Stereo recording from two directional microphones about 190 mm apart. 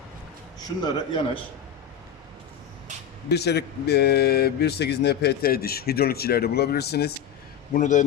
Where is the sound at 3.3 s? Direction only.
60° left (ahead or behind).